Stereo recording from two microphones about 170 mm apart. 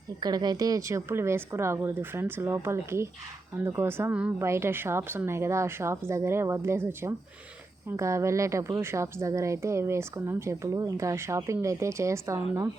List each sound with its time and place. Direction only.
0.2 s a woman's voice: 25° right (ahead or behind)